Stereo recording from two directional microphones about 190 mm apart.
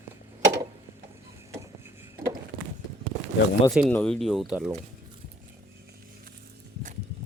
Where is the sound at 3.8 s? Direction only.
5° left (ahead or behind).